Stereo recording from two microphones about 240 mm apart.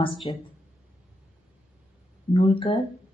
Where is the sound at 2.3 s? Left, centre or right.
Left.